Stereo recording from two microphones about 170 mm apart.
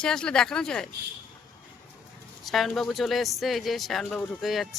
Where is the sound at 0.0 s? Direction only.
5° left (ahead or behind).